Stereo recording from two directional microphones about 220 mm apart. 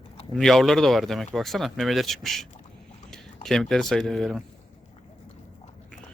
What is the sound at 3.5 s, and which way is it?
Speech, centre (ahead or behind).